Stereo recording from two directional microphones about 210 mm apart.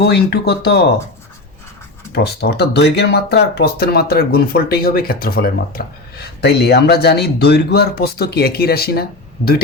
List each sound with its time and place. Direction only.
0.0 s speech: 50° left (ahead or behind)
2.1 s speech: 50° left (ahead or behind)